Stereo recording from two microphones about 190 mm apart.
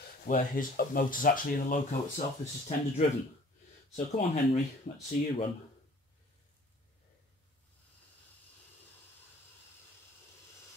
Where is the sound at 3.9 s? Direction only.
35° left (ahead or behind).